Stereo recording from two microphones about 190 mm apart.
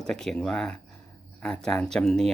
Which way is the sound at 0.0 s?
Centre (ahead or behind).